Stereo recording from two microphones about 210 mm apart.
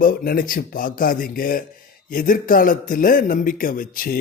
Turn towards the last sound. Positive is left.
turn(degrees=40)  # may be behind; listen again after turning